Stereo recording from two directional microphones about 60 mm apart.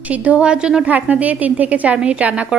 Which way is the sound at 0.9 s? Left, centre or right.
Right.